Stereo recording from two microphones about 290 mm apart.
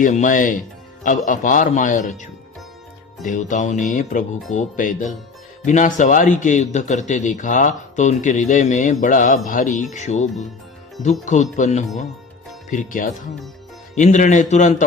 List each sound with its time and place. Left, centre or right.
0.0 s a man's voice: left